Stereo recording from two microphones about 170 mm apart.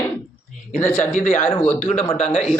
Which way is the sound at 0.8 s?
15° left (ahead or behind).